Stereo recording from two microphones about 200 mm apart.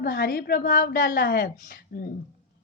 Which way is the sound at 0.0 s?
50° left (ahead or behind).